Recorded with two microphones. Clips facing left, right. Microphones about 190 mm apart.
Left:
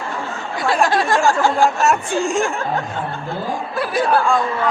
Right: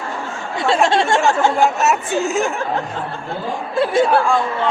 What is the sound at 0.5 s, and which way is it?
Speech, 25° right (ahead or behind).